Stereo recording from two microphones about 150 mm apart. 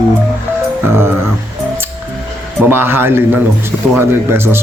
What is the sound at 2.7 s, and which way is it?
A man's voice, 15° right (ahead or behind).